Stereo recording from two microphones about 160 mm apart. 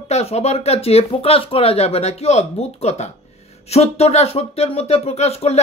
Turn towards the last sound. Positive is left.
turn(degrees=40)  # may be behind; listen again after turning